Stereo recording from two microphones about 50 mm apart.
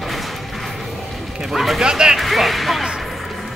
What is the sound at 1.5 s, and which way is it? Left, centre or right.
Speech, centre.